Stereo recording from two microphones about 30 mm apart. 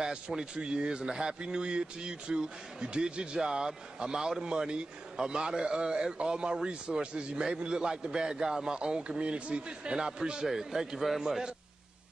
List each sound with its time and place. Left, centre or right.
0.0 s speech: centre
0.6 s speech: right
1.0 s a man's voice: right
1.4 s speech: right
3.4 s a man's voice: right
7.4 s a man's voice: right
8.7 s speech: right
9.9 s a man's voice: right